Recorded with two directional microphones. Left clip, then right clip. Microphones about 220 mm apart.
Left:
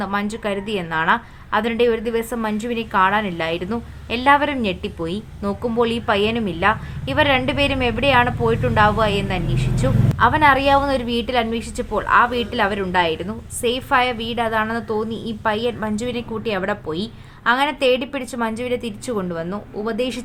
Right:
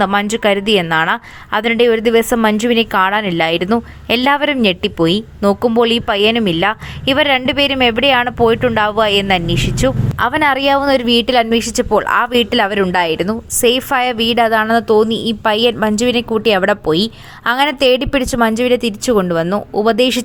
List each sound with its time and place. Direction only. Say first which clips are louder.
0.0 s a woman's voice: right 10 dB; 35° right (ahead or behind)